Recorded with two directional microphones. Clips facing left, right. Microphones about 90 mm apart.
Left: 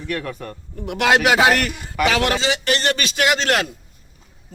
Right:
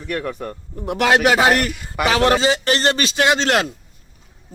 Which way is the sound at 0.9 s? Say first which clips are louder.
Right 1 dB; 35° right (ahead or behind).